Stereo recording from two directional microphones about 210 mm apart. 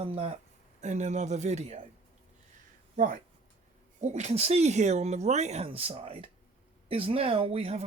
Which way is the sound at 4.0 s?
30° right (ahead or behind).